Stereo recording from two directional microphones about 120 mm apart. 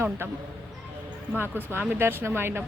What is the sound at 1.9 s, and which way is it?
Speech, 15° right (ahead or behind).